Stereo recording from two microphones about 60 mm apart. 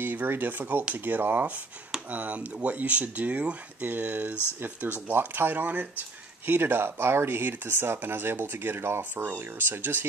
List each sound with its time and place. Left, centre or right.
0.0 s speech: right